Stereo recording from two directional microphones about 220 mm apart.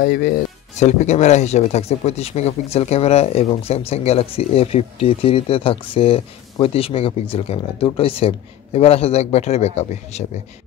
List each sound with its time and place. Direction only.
0.0 s speech: 45° left (ahead or behind)